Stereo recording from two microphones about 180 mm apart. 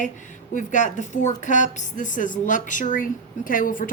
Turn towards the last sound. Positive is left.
turn(degrees=50)  # may be behind; listen again after turning